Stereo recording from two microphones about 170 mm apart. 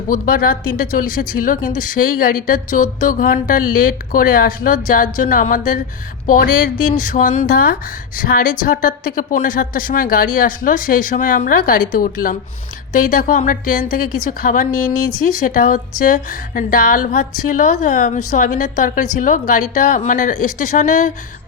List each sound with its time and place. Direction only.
0.1 s speech: 55° left (ahead or behind)